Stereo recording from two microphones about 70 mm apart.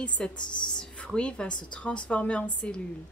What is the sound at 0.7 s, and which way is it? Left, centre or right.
Speech, centre.